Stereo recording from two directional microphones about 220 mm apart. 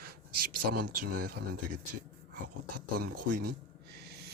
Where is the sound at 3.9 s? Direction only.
50° right (ahead or behind).